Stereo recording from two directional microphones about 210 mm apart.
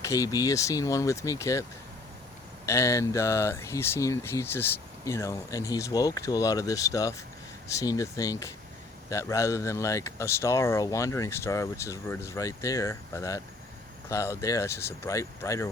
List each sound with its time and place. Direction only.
0.0 s speech: 15° left (ahead or behind)
2.6 s speech: 15° left (ahead or behind)